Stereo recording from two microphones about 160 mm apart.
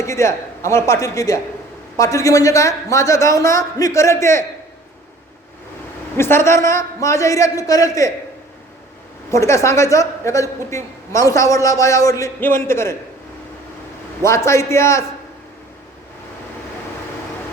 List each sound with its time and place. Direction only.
0.0 s a woman's voice: 20° left (ahead or behind)
6.1 s a woman's voice: 15° left (ahead or behind)
9.3 s a woman's voice: 20° left (ahead or behind)
14.2 s a man's voice: 15° left (ahead or behind)